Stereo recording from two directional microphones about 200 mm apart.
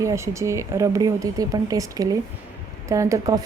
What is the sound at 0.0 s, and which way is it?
A woman's voice, 15° right (ahead or behind).